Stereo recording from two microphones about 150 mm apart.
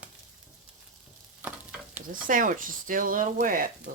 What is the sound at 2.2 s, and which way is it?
Speech, 65° right (ahead or behind).